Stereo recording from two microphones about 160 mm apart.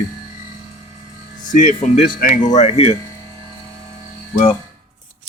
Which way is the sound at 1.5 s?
45° left (ahead or behind).